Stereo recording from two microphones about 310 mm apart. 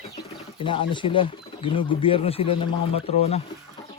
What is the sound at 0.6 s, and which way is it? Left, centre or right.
Speech, centre.